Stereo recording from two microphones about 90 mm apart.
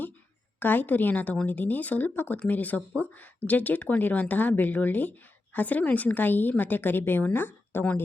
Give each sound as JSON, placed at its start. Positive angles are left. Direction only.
{"t": 0.6, "sound": "a woman's voice", "side_deg": 20}